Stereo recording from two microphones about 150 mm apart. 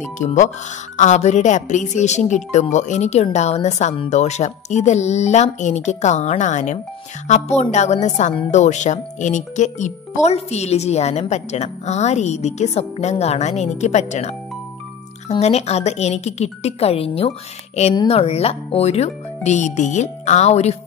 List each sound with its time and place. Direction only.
0.0 s a child's voice: 55° left (ahead or behind)